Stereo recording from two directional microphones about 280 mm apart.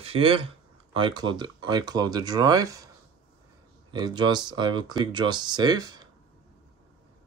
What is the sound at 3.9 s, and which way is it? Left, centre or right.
Speech, centre.